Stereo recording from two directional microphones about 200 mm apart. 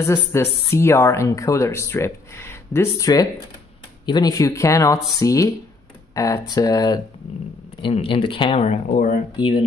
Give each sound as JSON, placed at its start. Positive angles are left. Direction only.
{"t": 0.0, "sound": "speech", "side_deg": 15}
{"t": 8.9, "sound": "speech", "side_deg": 45}